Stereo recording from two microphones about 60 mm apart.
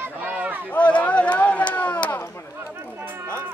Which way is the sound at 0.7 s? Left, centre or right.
Left.